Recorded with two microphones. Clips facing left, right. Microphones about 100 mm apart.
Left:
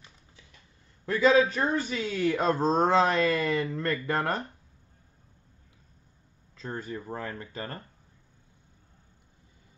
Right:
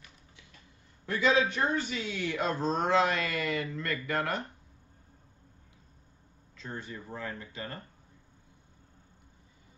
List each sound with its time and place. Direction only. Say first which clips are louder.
1.0 s a man's voice: left 5 dB; 40° left (ahead or behind)
6.5 s a man's voice: left 5 dB; 40° left (ahead or behind)